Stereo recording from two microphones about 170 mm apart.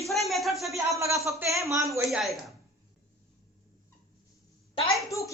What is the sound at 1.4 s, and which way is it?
Speech, 15° right (ahead or behind).